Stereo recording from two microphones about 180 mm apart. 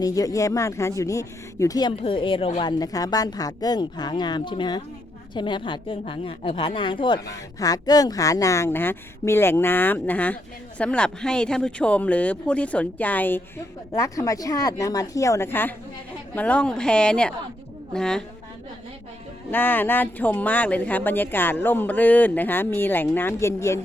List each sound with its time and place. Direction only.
0.0 s a woman's voice: 20° left (ahead or behind)
19.5 s speech: 10° left (ahead or behind)